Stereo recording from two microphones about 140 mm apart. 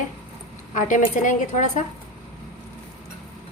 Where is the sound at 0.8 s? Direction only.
65° left (ahead or behind).